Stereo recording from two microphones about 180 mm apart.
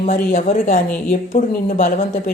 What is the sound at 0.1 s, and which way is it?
Speech, 45° left (ahead or behind).